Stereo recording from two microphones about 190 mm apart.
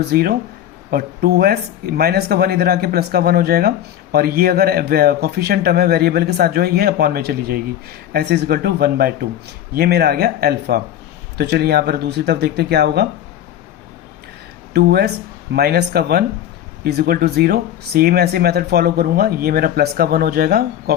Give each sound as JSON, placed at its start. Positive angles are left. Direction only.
{"t": 0.1, "sound": "speech", "side_deg": -55}
{"t": 14.7, "sound": "a woman's voice", "side_deg": -55}